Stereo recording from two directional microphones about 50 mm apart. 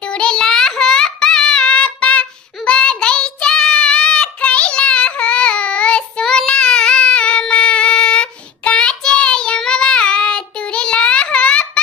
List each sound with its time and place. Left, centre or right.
0.0 s child singing: centre
6.2 s child singing: centre